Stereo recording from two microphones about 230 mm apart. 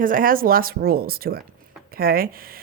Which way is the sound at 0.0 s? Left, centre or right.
Right.